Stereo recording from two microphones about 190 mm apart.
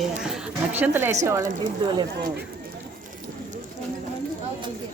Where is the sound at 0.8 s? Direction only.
10° right (ahead or behind).